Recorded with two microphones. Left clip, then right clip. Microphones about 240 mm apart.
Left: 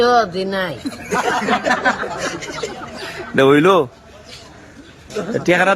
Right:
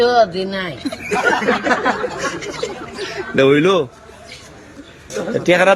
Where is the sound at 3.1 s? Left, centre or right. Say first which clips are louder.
Even; centre.